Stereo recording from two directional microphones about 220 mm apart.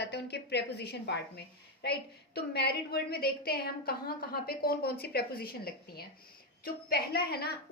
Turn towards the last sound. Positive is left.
turn(degrees=45)  # may be behind; listen again after turning